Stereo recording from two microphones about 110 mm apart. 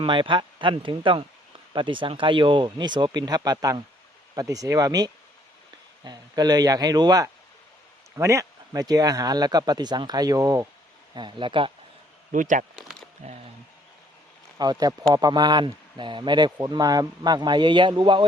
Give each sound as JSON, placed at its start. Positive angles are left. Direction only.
{"t": 0.0, "sound": "a man's voice", "side_deg": -50}
{"t": 11.1, "sound": "speech", "side_deg": -45}
{"t": 13.2, "sound": "speech", "side_deg": -70}
{"t": 14.6, "sound": "a man's voice", "side_deg": -35}